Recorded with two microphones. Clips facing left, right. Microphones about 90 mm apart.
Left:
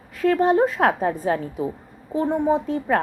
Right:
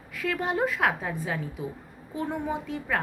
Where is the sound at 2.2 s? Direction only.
25° left (ahead or behind).